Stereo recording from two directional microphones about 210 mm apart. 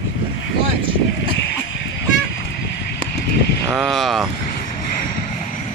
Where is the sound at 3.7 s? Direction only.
Centre (ahead or behind).